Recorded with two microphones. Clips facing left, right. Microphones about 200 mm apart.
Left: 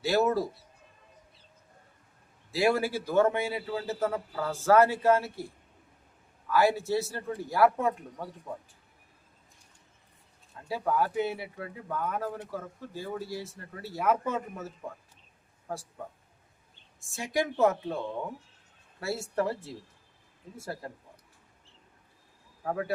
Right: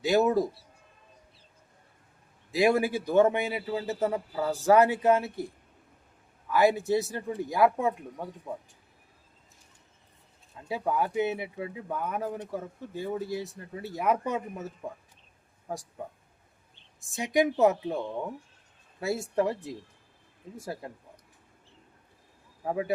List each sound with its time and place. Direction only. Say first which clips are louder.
0.0 s a man's voice: right 2 dB; 15° right (ahead or behind)
2.5 s a man's voice: right 2 dB; 15° right (ahead or behind)
6.5 s a man's voice: right 2 dB; 20° right (ahead or behind)
10.7 s a man's voice: even; 15° right (ahead or behind)
17.2 s a man's voice: right 3 dB; 15° right (ahead or behind)
20.6 s a man's voice: right 1 dB; 15° right (ahead or behind)
22.6 s speech: right 2 dB; 15° right (ahead or behind)